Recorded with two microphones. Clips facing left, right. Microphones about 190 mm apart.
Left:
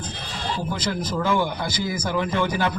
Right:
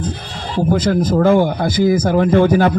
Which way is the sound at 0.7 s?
50° right (ahead or behind).